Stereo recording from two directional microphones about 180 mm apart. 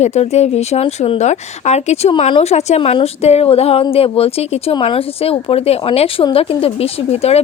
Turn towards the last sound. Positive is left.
turn(degrees=35)  # may be behind; listen again after turning